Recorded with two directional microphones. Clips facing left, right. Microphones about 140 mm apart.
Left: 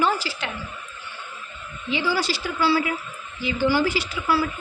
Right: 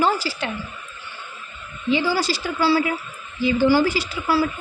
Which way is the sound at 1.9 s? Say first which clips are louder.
Right 3 dB; 40° right (ahead or behind).